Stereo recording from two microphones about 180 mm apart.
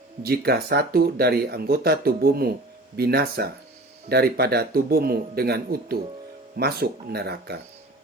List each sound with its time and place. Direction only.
0.2 s speech: 60° right (ahead or behind)